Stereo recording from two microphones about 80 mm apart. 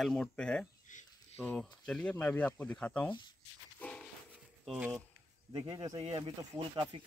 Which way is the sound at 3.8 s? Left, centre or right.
Centre.